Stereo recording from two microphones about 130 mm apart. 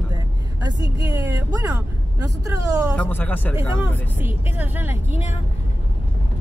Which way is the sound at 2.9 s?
10° left (ahead or behind).